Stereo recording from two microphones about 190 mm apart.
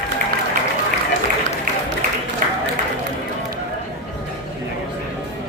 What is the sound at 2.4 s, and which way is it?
Applause, 45° right (ahead or behind).